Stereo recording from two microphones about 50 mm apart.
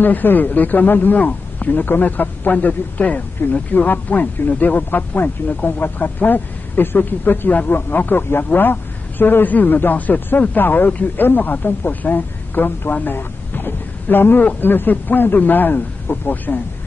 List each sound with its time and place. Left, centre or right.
0.0 s a man's voice: left